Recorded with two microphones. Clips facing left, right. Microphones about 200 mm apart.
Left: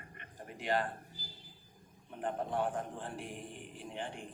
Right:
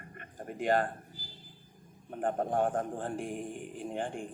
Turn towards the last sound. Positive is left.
turn(degrees=-45)  # may be behind; listen again after turning